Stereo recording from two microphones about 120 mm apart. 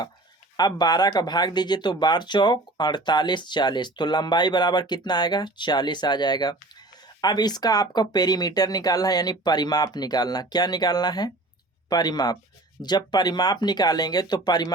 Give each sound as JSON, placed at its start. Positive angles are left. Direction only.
{"t": 0.5, "sound": "speech", "side_deg": 35}